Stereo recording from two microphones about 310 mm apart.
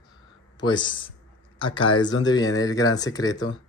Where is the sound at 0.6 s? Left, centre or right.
Centre.